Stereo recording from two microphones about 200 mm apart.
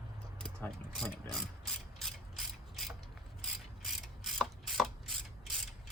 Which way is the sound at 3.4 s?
Centre (ahead or behind).